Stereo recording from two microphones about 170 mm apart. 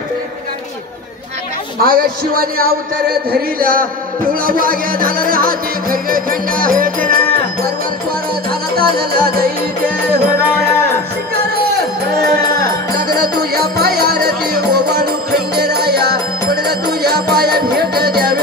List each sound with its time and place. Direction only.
1.8 s music: 60° right (ahead or behind)
8.7 s music: 60° right (ahead or behind)
12.2 s music: 60° right (ahead or behind)